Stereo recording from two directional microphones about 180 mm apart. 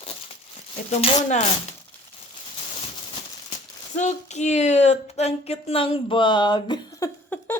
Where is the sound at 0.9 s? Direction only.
35° left (ahead or behind).